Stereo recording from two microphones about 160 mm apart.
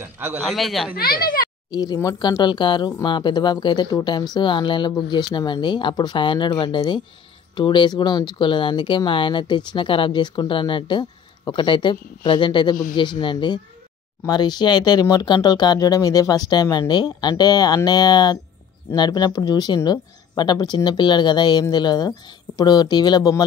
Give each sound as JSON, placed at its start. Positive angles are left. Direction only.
{"t": 0.5, "sound": "speech", "side_deg": 0}
{"t": 0.9, "sound": "speech", "side_deg": 70}
{"t": 1.7, "sound": "speech", "side_deg": 25}